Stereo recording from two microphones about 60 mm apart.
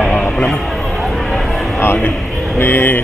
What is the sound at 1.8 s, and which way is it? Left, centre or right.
Speech, left.